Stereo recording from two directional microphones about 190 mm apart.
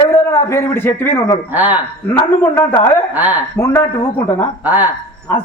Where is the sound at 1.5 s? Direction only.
10° right (ahead or behind).